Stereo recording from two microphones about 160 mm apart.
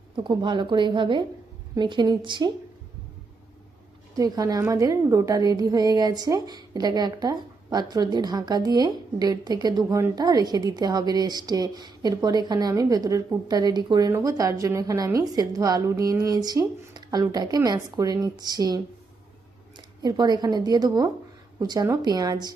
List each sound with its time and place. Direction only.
0.2 s a woman's voice: 30° right (ahead or behind)
4.1 s a woman's voice: 25° right (ahead or behind)
20.0 s a woman's voice: 25° right (ahead or behind)